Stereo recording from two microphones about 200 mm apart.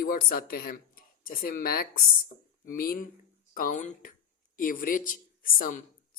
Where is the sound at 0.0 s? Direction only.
45° left (ahead or behind).